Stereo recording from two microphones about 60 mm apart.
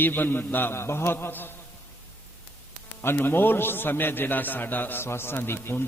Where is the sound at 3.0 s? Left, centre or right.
Left.